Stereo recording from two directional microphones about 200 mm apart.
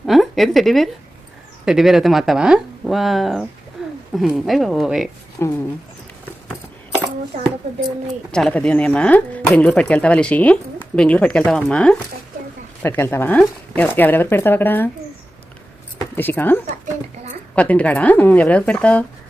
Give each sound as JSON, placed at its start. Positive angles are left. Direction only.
{"t": 0.0, "sound": "a sound", "side_deg": 0}
{"t": 1.6, "sound": "speech", "side_deg": 0}
{"t": 3.8, "sound": "a sound", "side_deg": 0}
{"t": 4.1, "sound": "speech", "side_deg": 0}
{"t": 5.4, "sound": "speech", "side_deg": 15}
{"t": 7.9, "sound": "speech", "side_deg": 0}
{"t": 16.1, "sound": "speech", "side_deg": 10}
{"t": 16.6, "sound": "a sound", "side_deg": -35}
{"t": 17.5, "sound": "speech", "side_deg": 5}